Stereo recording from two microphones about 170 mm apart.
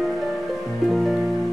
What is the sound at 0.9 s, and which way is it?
Music, centre (ahead or behind).